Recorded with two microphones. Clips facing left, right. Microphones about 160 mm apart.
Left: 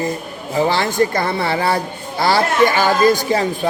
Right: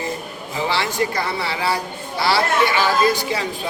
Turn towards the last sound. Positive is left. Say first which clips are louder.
# left 5 dB
turn(degrees=45)  # may be behind; listen again after turning